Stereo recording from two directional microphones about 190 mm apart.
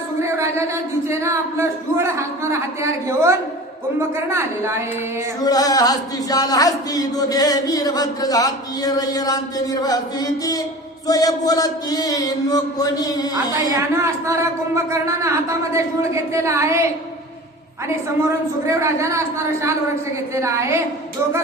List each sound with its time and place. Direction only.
0.2 s speech: 15° right (ahead or behind)
5.4 s a sound: 20° left (ahead or behind)
13.3 s speech: 15° right (ahead or behind)
18.6 s speech: 15° right (ahead or behind)
20.3 s speech: 15° right (ahead or behind)